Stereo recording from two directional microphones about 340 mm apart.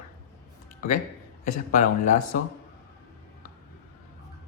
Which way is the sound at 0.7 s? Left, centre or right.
Left.